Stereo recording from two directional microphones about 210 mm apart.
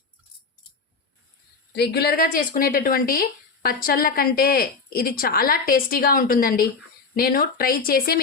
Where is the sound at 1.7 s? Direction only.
50° left (ahead or behind).